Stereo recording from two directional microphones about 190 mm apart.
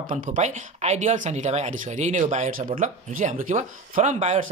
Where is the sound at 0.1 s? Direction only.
40° right (ahead or behind).